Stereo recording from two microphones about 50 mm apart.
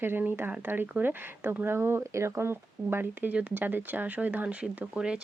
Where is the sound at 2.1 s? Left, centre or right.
Right.